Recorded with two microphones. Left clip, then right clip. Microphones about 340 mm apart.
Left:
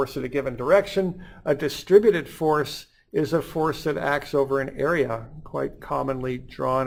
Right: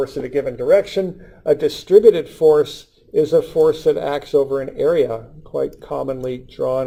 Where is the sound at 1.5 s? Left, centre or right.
Left.